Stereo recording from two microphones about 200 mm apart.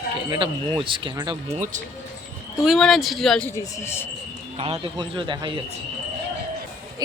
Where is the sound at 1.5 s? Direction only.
40° right (ahead or behind).